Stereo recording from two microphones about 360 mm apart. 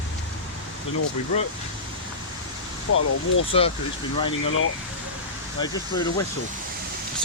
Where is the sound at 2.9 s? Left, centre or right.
Left.